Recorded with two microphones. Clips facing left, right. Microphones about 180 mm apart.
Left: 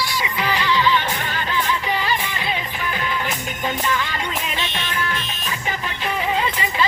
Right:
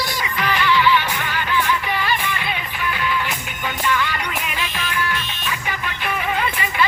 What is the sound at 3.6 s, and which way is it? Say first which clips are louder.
Music: right 1 dB; 30° left (ahead or behind).